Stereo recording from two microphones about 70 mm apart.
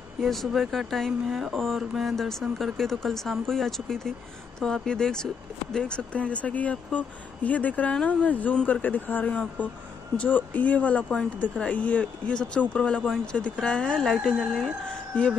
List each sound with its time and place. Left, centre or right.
0.2 s speech: centre; by 9.3 s left
9.3 s speech: centre